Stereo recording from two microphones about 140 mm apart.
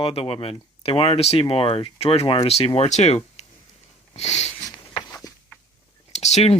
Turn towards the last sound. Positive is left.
turn(degrees=50)  # may be behind; listen again after turning